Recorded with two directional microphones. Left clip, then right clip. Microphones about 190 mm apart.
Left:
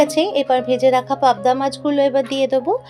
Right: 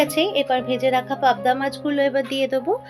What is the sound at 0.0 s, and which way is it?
Speech, 30° left (ahead or behind).